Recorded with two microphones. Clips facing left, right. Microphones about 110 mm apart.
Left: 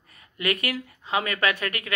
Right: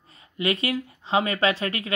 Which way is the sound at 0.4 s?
25° right (ahead or behind).